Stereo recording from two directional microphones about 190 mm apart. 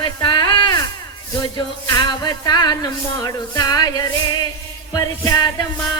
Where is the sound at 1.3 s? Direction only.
25° left (ahead or behind).